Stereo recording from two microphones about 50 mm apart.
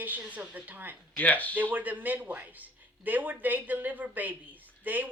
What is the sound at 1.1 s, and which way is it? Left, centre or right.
Speech, left.